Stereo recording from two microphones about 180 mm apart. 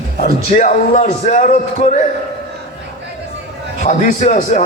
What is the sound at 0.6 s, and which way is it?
Speech, 40° left (ahead or behind).